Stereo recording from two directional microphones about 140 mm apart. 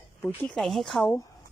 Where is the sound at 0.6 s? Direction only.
Centre (ahead or behind).